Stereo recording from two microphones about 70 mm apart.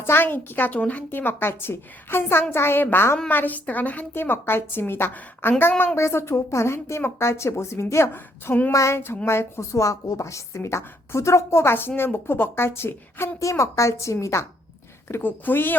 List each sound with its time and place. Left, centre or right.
0.0 s a woman's voice: left
6.0 s a woman's voice: left
8.7 s a woman's voice: left
13.4 s a woman's voice: left
15.0 s a woman's voice: left